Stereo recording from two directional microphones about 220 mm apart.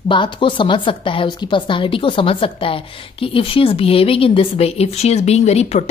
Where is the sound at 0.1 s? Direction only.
20° left (ahead or behind).